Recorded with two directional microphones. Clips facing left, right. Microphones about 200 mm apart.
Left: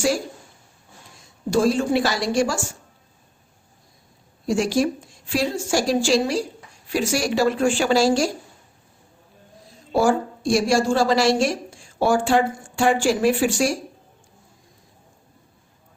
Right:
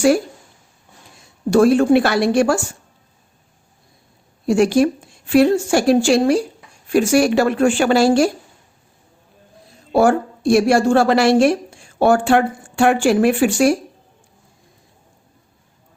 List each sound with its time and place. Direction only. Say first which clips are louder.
1.5 s a woman's voice: right 7 dB; 60° right (ahead or behind)
4.4 s a woman's voice: right 6 dB; 60° right (ahead or behind)
9.9 s a woman's voice: right 4 dB; 60° right (ahead or behind)